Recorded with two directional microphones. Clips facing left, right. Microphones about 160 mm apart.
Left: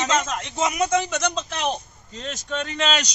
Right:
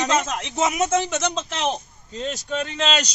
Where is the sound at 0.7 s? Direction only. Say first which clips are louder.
Left 1 dB; 25° right (ahead or behind).